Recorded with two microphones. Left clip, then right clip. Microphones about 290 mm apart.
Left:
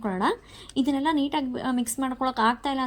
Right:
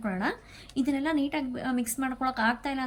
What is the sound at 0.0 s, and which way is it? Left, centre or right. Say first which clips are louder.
A woman's voice: left 5 dB; centre.